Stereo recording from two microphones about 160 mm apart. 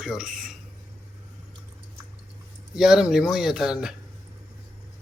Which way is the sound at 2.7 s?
5° right (ahead or behind).